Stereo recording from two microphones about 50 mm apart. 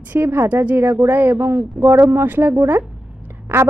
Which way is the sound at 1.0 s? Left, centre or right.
Right.